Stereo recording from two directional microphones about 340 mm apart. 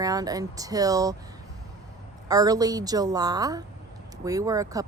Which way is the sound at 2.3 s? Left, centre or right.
Centre.